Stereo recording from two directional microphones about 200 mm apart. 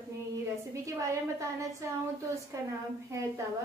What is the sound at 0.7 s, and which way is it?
Speech, 15° right (ahead or behind).